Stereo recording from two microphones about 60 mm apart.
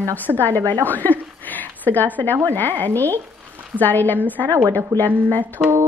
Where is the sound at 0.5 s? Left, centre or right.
Right.